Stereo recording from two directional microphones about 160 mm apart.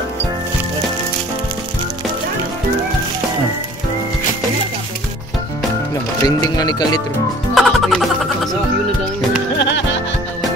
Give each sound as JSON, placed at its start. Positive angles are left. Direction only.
{"t": 6.2, "sound": "speech", "side_deg": 25}
{"t": 7.5, "sound": "music", "side_deg": 0}
{"t": 9.6, "sound": "music", "side_deg": 90}